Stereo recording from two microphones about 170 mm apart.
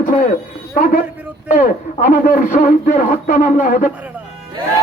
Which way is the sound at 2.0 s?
50° left (ahead or behind).